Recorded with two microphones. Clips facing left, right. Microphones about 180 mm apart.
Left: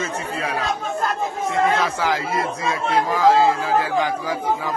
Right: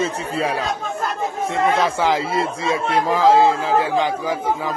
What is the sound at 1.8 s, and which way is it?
Speech, 25° right (ahead or behind).